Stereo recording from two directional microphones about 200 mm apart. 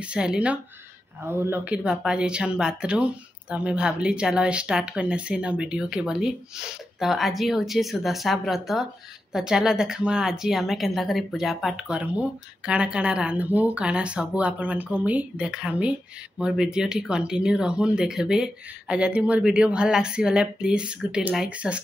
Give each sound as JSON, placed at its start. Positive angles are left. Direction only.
{"t": 0.0, "sound": "speech", "side_deg": -5}